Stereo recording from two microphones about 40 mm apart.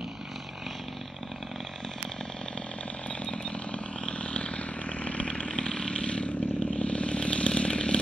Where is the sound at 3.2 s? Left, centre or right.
Left.